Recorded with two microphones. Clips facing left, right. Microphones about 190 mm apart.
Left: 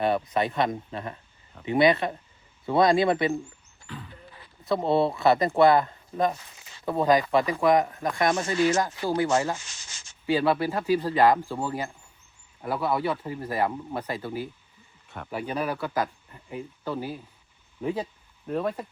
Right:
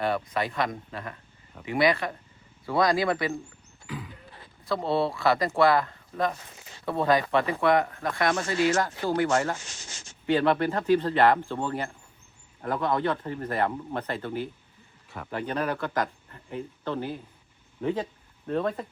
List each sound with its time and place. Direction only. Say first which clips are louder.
0.0 s speech: left 3 dB; 20° left (ahead or behind)
3.8 s a sound: right 3 dB; 10° right (ahead or behind)
4.6 s speech: left 3 dB; 20° left (ahead or behind)
9.8 s speech: right 5 dB; 55° right (ahead or behind)
10.2 s speech: even; 10° left (ahead or behind)